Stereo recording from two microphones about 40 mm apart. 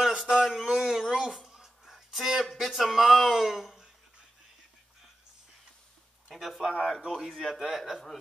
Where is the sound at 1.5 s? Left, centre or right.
Centre.